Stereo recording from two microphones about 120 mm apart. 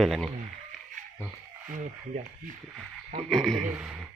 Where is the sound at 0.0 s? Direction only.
Centre (ahead or behind).